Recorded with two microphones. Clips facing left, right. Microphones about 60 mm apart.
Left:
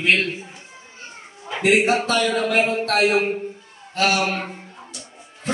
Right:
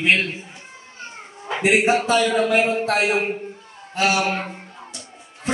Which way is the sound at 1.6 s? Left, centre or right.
Centre.